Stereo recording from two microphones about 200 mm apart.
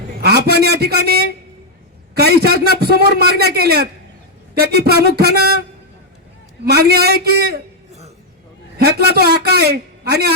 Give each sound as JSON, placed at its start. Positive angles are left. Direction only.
{"t": 0.2, "sound": "a man's voice", "side_deg": -50}
{"t": 6.7, "sound": "a man's voice", "side_deg": -50}
{"t": 9.1, "sound": "a man's voice", "side_deg": -50}